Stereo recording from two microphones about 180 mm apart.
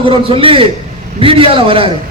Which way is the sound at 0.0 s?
30° right (ahead or behind).